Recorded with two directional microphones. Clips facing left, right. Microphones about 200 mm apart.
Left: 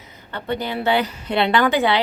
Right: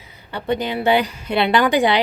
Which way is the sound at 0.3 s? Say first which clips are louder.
Right 3 dB; 15° right (ahead or behind).